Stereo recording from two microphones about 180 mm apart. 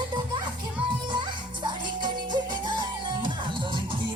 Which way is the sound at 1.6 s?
25° right (ahead or behind).